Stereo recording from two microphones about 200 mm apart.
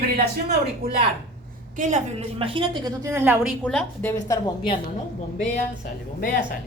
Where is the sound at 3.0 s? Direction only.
10° right (ahead or behind).